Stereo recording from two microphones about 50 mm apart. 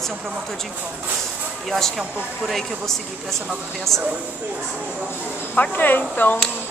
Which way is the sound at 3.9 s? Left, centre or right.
Centre.